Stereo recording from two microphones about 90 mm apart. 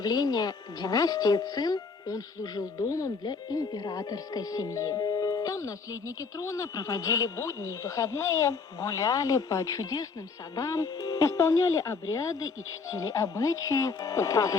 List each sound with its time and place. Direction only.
0.0 s speech: 50° left (ahead or behind)